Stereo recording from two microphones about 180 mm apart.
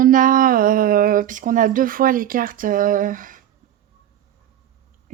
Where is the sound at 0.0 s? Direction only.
50° right (ahead or behind).